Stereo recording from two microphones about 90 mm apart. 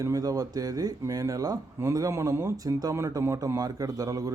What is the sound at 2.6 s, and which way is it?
Speech, 40° right (ahead or behind).